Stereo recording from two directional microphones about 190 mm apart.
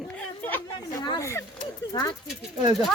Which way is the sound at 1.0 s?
20° left (ahead or behind).